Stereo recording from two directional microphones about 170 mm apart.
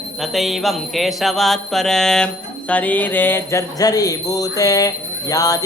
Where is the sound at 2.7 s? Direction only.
10° left (ahead or behind).